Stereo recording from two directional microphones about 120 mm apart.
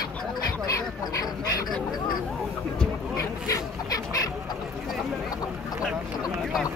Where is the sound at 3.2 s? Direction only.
30° left (ahead or behind).